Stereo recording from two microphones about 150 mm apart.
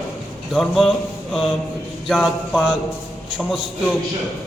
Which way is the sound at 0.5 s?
Centre (ahead or behind).